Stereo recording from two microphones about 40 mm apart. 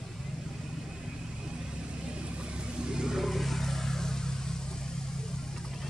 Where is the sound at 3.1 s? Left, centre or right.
Centre.